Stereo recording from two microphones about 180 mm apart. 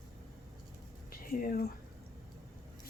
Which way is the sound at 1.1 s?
50° left (ahead or behind).